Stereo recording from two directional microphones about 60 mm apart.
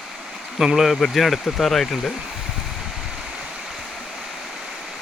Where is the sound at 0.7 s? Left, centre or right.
Centre.